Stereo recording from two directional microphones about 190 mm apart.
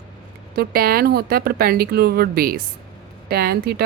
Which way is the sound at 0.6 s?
55° right (ahead or behind).